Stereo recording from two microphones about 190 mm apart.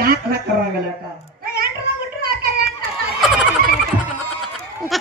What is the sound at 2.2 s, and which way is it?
Children playing, 50° right (ahead or behind).